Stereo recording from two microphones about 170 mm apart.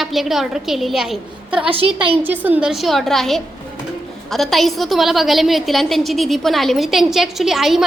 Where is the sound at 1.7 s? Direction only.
30° right (ahead or behind).